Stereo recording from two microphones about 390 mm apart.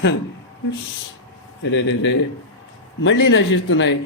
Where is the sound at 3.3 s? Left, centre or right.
Left.